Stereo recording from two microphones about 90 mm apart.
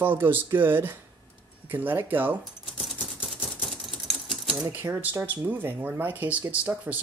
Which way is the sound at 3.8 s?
Centre (ahead or behind).